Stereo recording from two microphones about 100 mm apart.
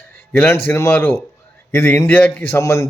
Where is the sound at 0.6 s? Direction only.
25° left (ahead or behind).